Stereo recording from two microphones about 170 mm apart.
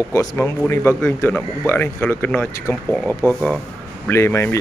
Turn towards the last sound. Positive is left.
turn(degrees=15)  # may be behind; listen again after turning